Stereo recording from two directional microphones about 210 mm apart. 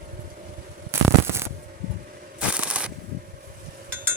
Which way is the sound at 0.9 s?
10° right (ahead or behind).